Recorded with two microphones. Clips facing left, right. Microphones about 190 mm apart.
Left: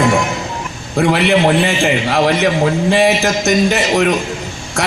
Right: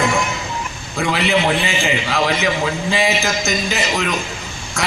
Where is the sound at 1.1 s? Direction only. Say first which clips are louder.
Left 4 dB; 65° left (ahead or behind).